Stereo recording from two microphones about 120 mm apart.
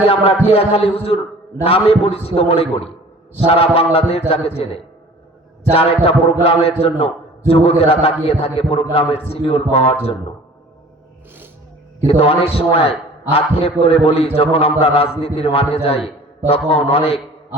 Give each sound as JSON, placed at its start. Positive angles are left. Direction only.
{"t": 0.0, "sound": "a man's voice", "side_deg": 55}
{"t": 12.0, "sound": "a man's voice", "side_deg": 55}